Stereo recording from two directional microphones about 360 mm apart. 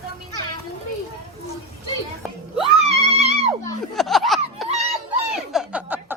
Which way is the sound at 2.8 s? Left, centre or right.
Centre.